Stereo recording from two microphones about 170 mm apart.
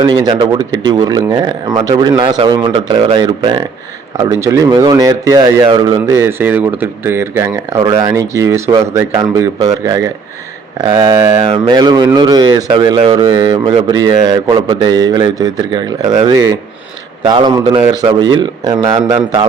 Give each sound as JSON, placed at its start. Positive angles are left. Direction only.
{"t": 0.0, "sound": "speech", "side_deg": -25}
{"t": 4.2, "sound": "speech", "side_deg": -15}
{"t": 11.4, "sound": "speech", "side_deg": -30}